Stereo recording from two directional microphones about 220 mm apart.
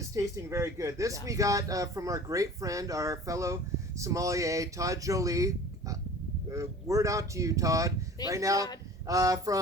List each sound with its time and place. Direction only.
0.1 s speech: 15° right (ahead or behind)